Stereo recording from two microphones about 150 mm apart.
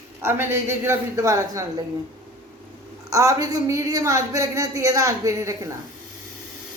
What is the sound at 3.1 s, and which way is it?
A woman's voice, 20° right (ahead or behind).